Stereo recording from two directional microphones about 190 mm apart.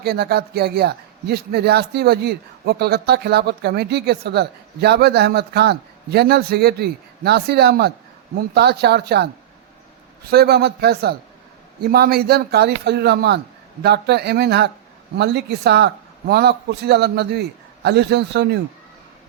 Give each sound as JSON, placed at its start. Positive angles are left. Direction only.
{"t": 0.0, "sound": "speech", "side_deg": -55}